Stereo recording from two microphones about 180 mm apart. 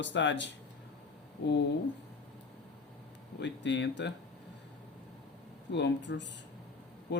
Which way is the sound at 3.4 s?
75° left (ahead or behind).